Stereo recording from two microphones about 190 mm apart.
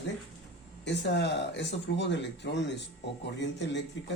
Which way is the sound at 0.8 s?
65° left (ahead or behind).